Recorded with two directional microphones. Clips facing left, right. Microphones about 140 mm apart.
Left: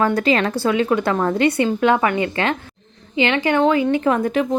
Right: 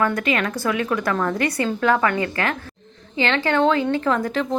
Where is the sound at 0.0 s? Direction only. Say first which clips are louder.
Left 4 dB; 30° left (ahead or behind).